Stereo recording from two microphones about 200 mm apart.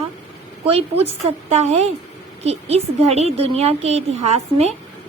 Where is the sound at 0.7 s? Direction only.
30° right (ahead or behind).